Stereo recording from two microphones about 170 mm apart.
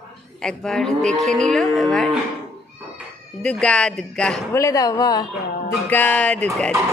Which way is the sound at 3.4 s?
5° left (ahead or behind).